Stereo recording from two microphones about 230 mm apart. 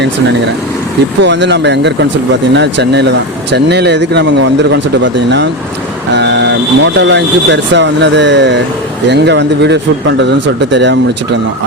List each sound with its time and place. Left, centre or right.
0.0 s speech: right